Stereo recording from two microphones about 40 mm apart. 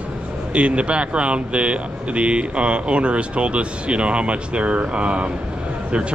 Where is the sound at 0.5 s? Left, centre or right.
Right.